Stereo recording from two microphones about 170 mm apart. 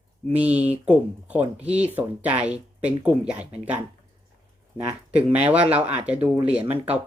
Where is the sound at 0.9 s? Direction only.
10° right (ahead or behind).